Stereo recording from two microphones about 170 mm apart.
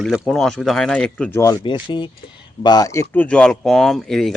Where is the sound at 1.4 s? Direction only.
20° left (ahead or behind).